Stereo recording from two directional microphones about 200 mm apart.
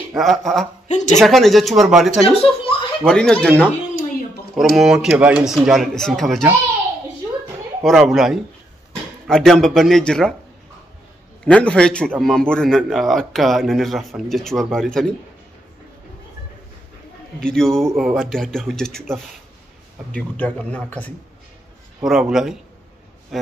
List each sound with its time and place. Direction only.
0.2 s a man's voice: centre (ahead or behind)
0.8 s speech: 35° left (ahead or behind)
1.2 s a man's voice: centre (ahead or behind)
2.2 s a sound: 25° left (ahead or behind)
3.0 s a man's voice: 5° left (ahead or behind)
7.8 s a man's voice: centre (ahead or behind)
11.4 s a man's voice: 5° left (ahead or behind)
17.4 s a man's voice: 5° left (ahead or behind)